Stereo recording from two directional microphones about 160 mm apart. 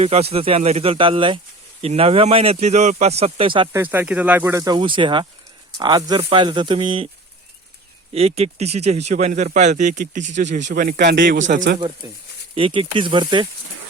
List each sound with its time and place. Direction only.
0.0 s speech: 40° right (ahead or behind)
3.7 s speech: 15° right (ahead or behind); by 7.1 s 35° right (ahead or behind)
8.1 s speech: 40° right (ahead or behind)
10.7 s speech: 75° right (ahead or behind); by 11.8 s 55° right (ahead or behind)
12.5 s speech: 35° right (ahead or behind)